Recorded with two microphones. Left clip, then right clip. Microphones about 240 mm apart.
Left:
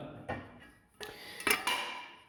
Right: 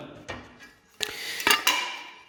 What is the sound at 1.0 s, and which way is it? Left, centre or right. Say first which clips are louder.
Dishes: right 14 dB; right.